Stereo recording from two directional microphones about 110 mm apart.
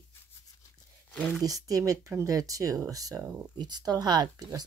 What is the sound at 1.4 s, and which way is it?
Speech, 35° right (ahead or behind).